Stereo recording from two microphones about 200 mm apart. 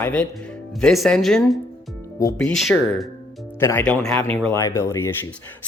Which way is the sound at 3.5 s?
10° left (ahead or behind).